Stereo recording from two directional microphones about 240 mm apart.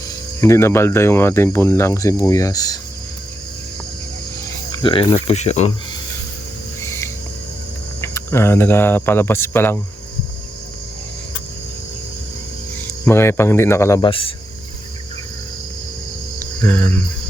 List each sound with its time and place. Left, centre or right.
0.4 s speech: centre
4.7 s cricket: left
5.1 s speech: left
6.8 s owl: centre
8.0 s speech: centre
13.1 s speech: centre
16.4 s cricket: centre